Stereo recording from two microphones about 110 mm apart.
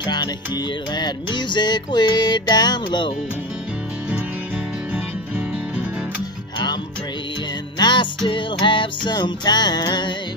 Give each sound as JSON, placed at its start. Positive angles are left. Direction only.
{"t": 0.0, "sound": "music", "side_deg": 40}
{"t": 7.8, "sound": "music", "side_deg": 45}